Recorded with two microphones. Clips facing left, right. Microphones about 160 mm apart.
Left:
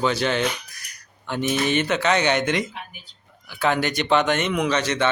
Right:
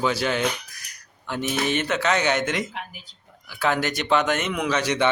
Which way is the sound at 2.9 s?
90° right.